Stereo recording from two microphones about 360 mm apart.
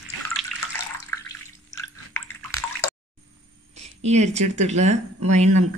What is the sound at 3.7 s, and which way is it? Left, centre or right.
Speech, centre.